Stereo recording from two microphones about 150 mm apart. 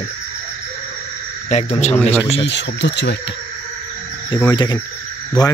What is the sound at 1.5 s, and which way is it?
Speech, 45° left (ahead or behind).